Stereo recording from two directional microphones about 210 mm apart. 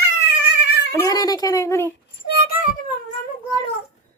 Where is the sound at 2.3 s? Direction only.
45° left (ahead or behind).